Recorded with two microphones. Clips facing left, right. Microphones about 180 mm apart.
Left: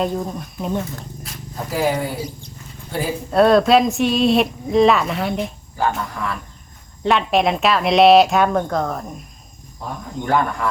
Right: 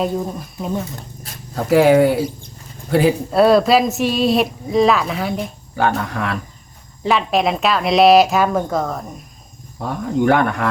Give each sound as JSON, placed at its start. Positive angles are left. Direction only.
{"t": 0.0, "sound": "a woman's voice", "side_deg": -5}
{"t": 1.5, "sound": "speech", "side_deg": -70}
{"t": 3.3, "sound": "a woman's voice", "side_deg": -5}
{"t": 6.1, "sound": "speech", "side_deg": -75}
{"t": 7.0, "sound": "a woman's voice", "side_deg": 0}
{"t": 9.8, "sound": "speech", "side_deg": -70}